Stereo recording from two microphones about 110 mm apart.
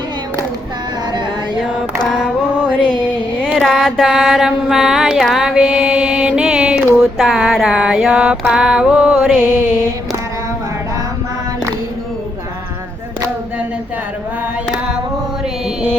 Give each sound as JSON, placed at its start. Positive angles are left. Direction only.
{"t": 3.6, "sound": "mantra", "side_deg": 0}
{"t": 7.0, "sound": "speech", "side_deg": 0}
{"t": 8.5, "sound": "music", "side_deg": -10}
{"t": 9.4, "sound": "music", "side_deg": -20}